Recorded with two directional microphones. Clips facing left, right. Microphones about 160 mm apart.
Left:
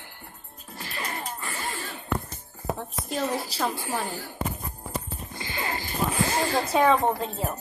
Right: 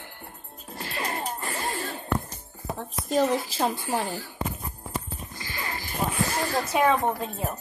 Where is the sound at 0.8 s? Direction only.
35° right (ahead or behind).